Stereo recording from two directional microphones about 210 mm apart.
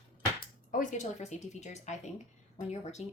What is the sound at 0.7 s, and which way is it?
Speech, 35° left (ahead or behind).